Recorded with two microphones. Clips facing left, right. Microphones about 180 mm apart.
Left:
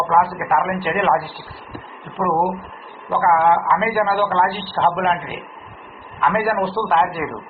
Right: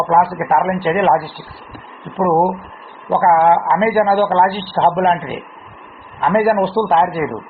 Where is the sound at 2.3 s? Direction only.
30° right (ahead or behind).